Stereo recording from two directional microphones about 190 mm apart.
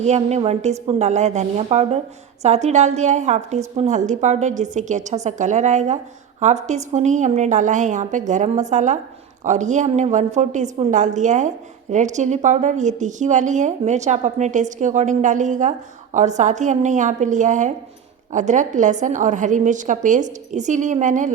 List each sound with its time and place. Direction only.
0.0 s a woman's voice: 35° right (ahead or behind)